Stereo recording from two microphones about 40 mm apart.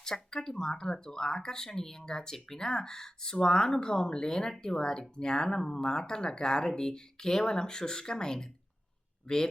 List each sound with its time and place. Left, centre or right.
0.0 s speech: centre